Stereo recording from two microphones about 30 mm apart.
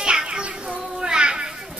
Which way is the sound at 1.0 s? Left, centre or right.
Right.